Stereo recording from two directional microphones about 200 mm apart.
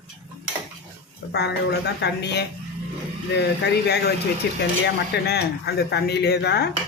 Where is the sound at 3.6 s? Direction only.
60° left (ahead or behind).